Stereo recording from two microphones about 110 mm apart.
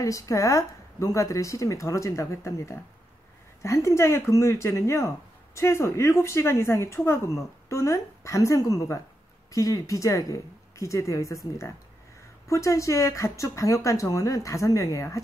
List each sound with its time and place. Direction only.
0.0 s speech: 30° left (ahead or behind)